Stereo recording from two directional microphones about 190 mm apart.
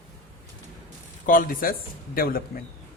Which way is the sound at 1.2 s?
45° left (ahead or behind).